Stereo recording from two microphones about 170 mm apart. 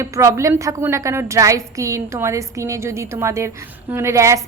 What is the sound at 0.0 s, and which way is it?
A woman's voice, 15° right (ahead or behind).